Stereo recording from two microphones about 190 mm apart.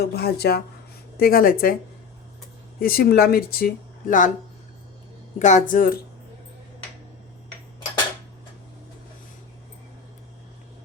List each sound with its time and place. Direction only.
0.0 s a woman's voice: 55° left (ahead or behind)
2.7 s speech: 50° left (ahead or behind)
5.4 s a woman's voice: 40° left (ahead or behind)